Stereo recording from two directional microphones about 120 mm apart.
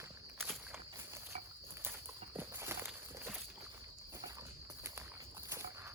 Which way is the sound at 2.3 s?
20° right (ahead or behind).